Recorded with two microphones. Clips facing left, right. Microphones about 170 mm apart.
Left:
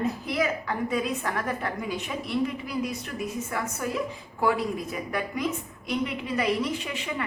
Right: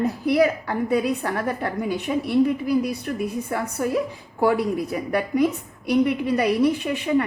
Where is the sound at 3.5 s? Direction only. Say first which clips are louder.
Right 5 dB; 35° right (ahead or behind).